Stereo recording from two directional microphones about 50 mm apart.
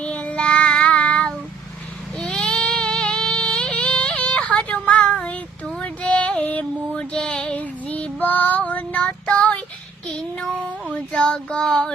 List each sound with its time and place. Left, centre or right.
0.0 s child singing: left
2.1 s goat: centre
2.4 s a sound: centre
4.2 s child singing: left
10.9 s child singing: centre